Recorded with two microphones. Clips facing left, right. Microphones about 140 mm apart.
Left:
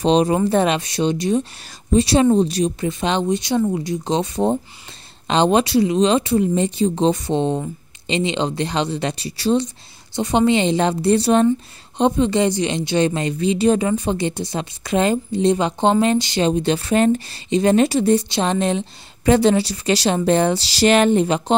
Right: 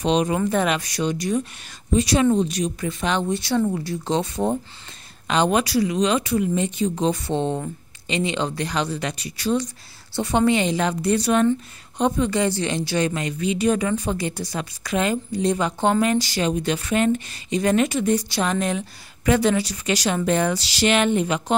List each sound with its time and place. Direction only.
0.0 s a woman's voice: 30° left (ahead or behind)